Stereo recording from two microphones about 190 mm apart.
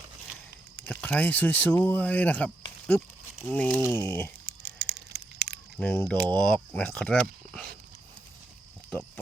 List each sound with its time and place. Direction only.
0.9 s speech: 10° left (ahead or behind)
4.8 s a sound: 55° right (ahead or behind)
5.7 s speech: 5° left (ahead or behind)